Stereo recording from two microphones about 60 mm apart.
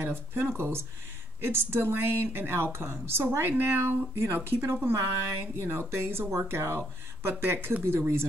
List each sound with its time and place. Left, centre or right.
0.0 s speech: right